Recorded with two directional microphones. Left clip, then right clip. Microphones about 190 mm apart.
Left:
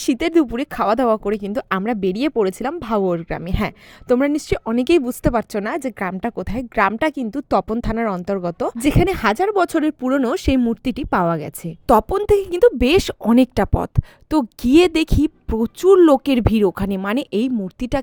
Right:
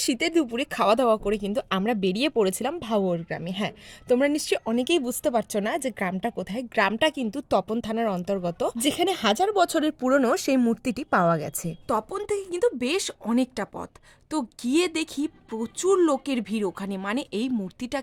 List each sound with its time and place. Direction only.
0.0 s speech: 35° left (ahead or behind)
11.9 s speech: 45° left (ahead or behind)